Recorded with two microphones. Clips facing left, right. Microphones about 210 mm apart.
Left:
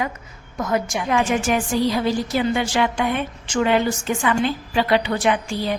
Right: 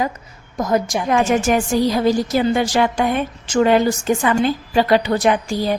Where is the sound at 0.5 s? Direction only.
35° right (ahead or behind).